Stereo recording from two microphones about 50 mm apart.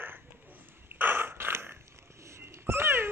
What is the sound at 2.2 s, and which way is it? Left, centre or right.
Cat, right.